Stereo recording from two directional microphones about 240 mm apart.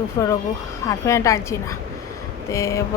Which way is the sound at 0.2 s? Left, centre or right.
Centre.